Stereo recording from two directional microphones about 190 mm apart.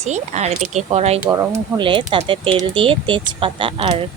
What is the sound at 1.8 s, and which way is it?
Speech, 25° right (ahead or behind).